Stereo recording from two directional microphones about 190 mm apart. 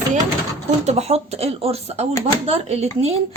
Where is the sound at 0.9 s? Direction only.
35° right (ahead or behind).